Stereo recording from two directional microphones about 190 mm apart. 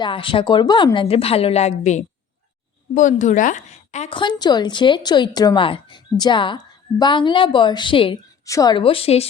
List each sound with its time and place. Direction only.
0.0 s a woman's voice: 25° left (ahead or behind)
4.2 s a woman's voice: 20° left (ahead or behind)